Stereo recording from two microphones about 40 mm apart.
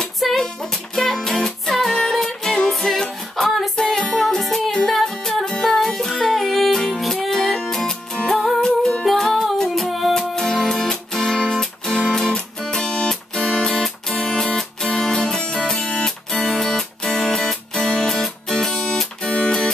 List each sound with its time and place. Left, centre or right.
0.2 s music: centre
3.4 s music: centre
3.9 s music: centre
8.5 s music: centre
9.0 s music: centre
10.6 s music: centre; by 19.7 s left